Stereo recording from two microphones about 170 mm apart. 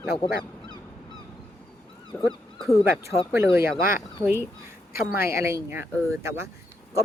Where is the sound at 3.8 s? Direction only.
55° left (ahead or behind).